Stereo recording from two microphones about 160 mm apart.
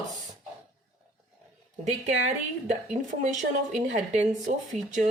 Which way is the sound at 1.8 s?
45° right (ahead or behind).